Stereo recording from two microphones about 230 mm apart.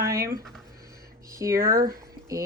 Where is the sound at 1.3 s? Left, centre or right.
Centre.